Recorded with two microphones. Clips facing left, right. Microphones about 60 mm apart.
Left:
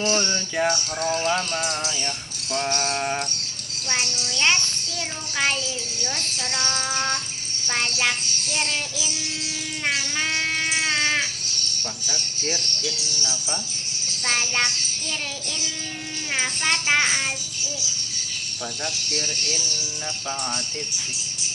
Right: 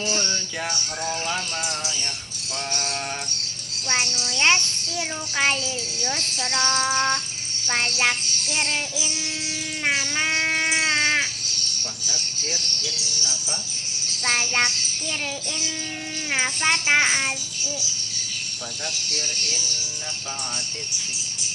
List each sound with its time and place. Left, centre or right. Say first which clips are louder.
0.2 s speech: left 5 dB; centre
2.5 s music: left 5 dB; left
3.8 s a child's voice: right 2 dB; centre
9.8 s cat: right 2 dB; centre
12.0 s speech: left 3 dB; left
14.3 s a child's voice: right 1 dB; centre
16.3 s a child's voice: right 2 dB; centre
19.1 s speech: left 2 dB; centre